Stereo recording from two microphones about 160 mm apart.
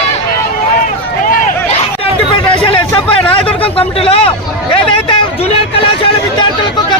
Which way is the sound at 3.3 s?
35° left (ahead or behind).